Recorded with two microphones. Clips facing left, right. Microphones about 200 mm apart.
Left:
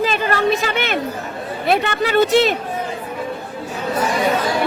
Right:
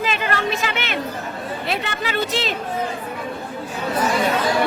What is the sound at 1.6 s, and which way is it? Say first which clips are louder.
Speech: left 10 dB; 55° left (ahead or behind).